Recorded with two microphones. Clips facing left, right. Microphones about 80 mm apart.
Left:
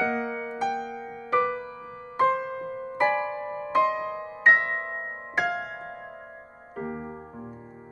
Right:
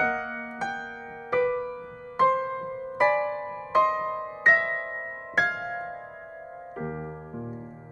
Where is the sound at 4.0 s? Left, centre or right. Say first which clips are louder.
Right 2 dB; right.